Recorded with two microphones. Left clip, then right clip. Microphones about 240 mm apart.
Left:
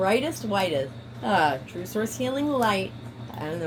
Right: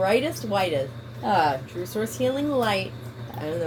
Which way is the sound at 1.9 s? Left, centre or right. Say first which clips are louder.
Right 2 dB; left.